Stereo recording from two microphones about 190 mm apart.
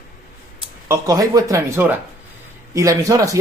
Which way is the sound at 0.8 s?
15° right (ahead or behind).